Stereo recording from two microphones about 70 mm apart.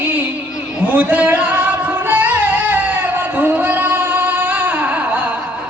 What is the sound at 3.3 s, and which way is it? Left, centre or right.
Singing, right.